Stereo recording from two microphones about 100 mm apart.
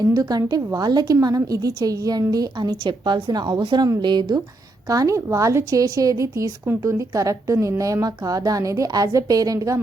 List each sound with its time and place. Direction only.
0.0 s a woman's voice: 40° right (ahead or behind)
4.9 s a woman's voice: 35° right (ahead or behind)